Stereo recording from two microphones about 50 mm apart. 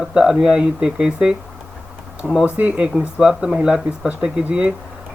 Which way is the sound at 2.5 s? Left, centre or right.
Right.